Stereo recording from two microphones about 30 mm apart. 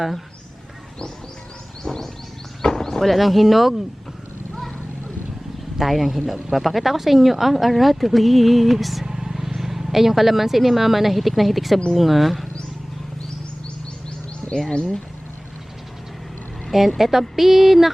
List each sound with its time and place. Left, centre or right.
1.8 s wild animals: centre
2.7 s a sound: centre
3.1 s speech: centre
5.8 s speech: centre
9.0 s vehicle: centre
9.3 s speech: centre
14.7 s speech: left
17.0 s speech: centre